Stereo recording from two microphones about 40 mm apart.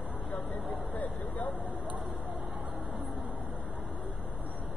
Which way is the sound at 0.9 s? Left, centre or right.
Left.